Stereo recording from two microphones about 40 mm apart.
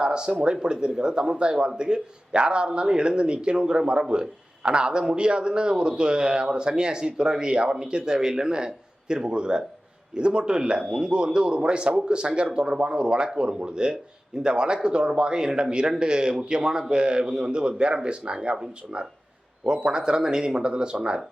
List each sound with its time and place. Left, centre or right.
0.0 s a man's voice: right